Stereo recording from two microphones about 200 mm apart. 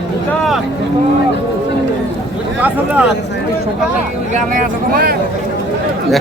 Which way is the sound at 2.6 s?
10° right (ahead or behind).